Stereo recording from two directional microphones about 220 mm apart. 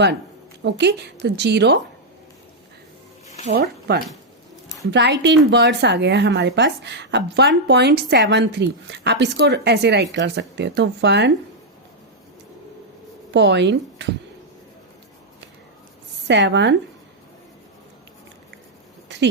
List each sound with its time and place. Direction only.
0.6 s speech: 50° right (ahead or behind)
3.5 s speech: 45° right (ahead or behind)
13.3 s speech: 50° right (ahead or behind)
16.2 s speech: 55° right (ahead or behind)
19.0 s a sound: 50° right (ahead or behind)